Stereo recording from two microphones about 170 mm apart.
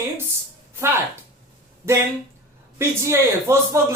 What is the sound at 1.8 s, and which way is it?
A man's voice, 15° right (ahead or behind).